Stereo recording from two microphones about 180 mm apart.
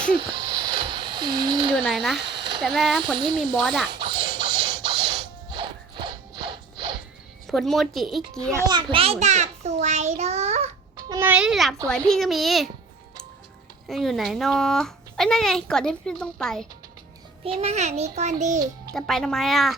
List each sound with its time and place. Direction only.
0.1 s a sound: 25° right (ahead or behind)
1.7 s a child's voice: centre (ahead or behind)
2.2 s a sound: 70° right (ahead or behind)
2.6 s a child's voice: centre (ahead or behind)
3.2 s speech: 25° right (ahead or behind)
3.5 s a child's voice: centre (ahead or behind)
3.8 s music: 25° right (ahead or behind)
7.4 s a child's voice: centre (ahead or behind)
8.7 s a child's voice: 30° right (ahead or behind)
10.9 s babbling: 20° right (ahead or behind)
11.3 s a child's voice: 5° right (ahead or behind)
13.8 s a child's voice: centre (ahead or behind)
17.4 s a child's voice: 35° right (ahead or behind)
18.9 s a child's voice: centre (ahead or behind)